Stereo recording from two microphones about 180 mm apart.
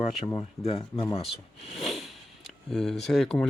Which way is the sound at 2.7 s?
Centre (ahead or behind).